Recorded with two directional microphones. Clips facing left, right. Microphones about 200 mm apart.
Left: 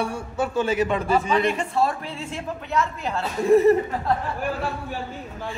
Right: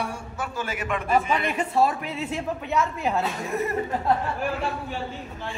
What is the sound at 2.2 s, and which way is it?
A man's voice, centre (ahead or behind).